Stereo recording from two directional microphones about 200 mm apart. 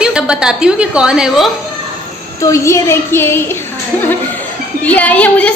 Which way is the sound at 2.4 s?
15° left (ahead or behind).